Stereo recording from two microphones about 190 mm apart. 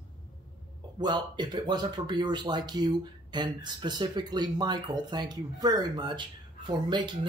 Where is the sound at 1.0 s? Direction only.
20° right (ahead or behind).